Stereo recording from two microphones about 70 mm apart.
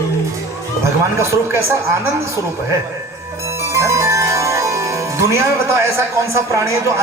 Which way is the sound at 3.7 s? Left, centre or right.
Right.